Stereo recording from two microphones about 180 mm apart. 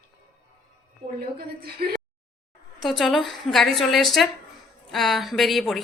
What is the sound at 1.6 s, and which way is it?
Speech, 60° right (ahead or behind).